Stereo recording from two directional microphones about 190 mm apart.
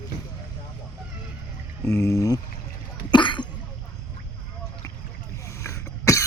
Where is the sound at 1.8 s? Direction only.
15° left (ahead or behind).